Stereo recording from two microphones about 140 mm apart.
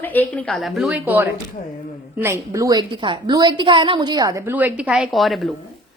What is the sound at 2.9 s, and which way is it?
A woman's voice, 35° right (ahead or behind).